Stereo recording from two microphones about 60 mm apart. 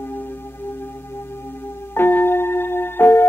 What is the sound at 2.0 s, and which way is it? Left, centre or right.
Music, left.